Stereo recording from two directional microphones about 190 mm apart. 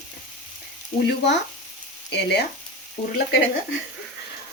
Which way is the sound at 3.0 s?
45° left (ahead or behind).